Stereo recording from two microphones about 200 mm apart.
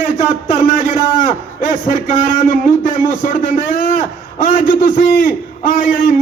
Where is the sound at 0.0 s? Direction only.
45° left (ahead or behind).